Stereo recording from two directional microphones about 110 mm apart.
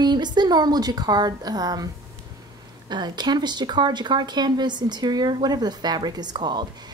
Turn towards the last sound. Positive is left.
turn(degrees=-40)  # may be behind; listen again after turning